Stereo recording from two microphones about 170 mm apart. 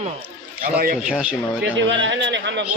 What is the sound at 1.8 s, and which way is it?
Speech, 90° right.